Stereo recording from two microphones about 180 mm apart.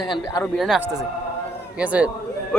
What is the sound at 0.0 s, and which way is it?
Speech, 25° left (ahead or behind).